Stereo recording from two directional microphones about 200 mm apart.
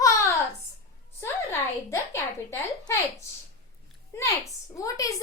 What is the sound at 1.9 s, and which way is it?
A woman's voice, 15° left (ahead or behind).